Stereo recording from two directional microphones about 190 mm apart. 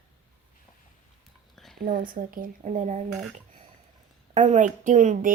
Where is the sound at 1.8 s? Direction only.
45° right (ahead or behind).